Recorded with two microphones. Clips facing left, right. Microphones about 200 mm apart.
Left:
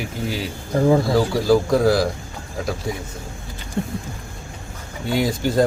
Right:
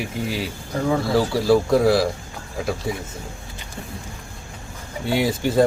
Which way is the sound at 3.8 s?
55° left (ahead or behind).